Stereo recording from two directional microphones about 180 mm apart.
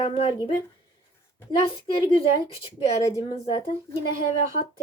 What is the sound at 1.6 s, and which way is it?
A woman's voice, 30° left (ahead or behind).